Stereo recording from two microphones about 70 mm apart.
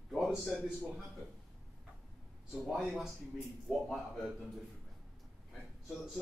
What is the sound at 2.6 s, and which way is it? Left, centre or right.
Speech, centre.